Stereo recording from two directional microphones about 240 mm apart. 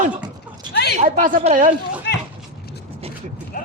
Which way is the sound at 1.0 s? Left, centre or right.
Right.